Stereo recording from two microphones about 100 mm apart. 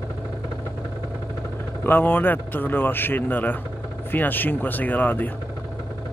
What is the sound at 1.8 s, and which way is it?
A man's voice, 20° left (ahead or behind).